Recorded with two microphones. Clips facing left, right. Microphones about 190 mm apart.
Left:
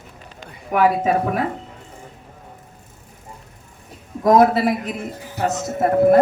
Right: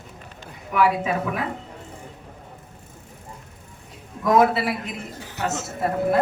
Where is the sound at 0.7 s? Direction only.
45° left (ahead or behind).